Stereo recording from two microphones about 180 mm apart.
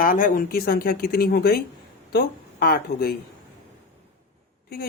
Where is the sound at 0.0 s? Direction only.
50° left (ahead or behind).